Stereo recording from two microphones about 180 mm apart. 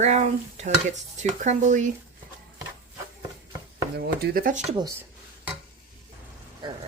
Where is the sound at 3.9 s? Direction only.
65° right (ahead or behind).